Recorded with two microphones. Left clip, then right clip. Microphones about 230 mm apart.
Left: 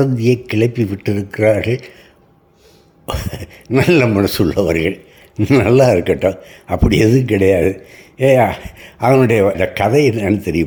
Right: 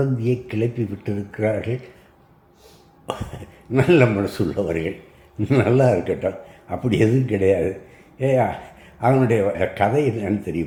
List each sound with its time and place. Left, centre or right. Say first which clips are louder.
0.0 s speech: left 8 dB; left
3.1 s speech: left 5 dB; left